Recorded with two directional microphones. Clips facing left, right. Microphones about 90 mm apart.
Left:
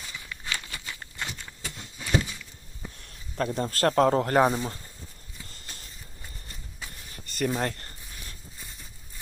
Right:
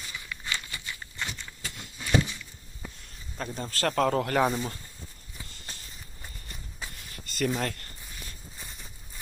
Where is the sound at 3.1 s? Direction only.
60° left (ahead or behind).